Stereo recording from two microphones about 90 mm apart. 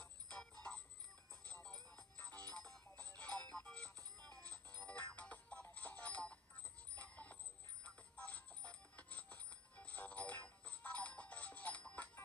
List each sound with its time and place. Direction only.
0.0 s music: 10° left (ahead or behind)